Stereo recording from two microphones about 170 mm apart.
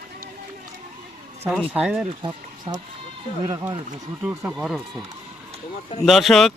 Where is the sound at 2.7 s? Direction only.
30° right (ahead or behind).